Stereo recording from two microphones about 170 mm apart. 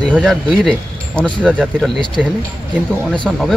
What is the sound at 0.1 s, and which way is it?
Speech, centre (ahead or behind).